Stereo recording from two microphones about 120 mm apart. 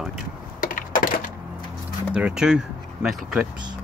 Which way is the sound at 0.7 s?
90° left.